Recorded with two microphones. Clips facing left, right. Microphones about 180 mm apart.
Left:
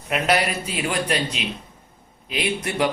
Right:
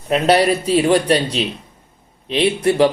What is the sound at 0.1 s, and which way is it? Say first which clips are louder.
A man's voice: right 7 dB; 30° right (ahead or behind).